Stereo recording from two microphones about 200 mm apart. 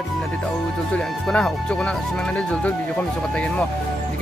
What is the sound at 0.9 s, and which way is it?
Speech, 5° left (ahead or behind).